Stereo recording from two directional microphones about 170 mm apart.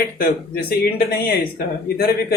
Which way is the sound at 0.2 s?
65° left (ahead or behind).